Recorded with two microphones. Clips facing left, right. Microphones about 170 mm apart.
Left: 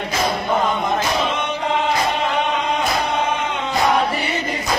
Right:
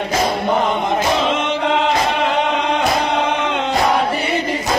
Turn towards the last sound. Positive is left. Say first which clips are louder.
# right 4 dB
turn(degrees=-80)